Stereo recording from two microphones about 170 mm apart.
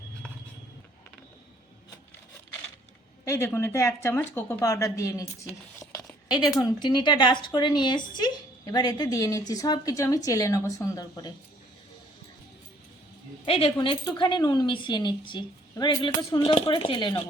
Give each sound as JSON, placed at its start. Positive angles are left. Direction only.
{"t": 3.2, "sound": "speech", "side_deg": 15}
{"t": 5.8, "sound": "a sound", "side_deg": 20}
{"t": 6.6, "sound": "speech", "side_deg": 25}
{"t": 13.4, "sound": "speech", "side_deg": 35}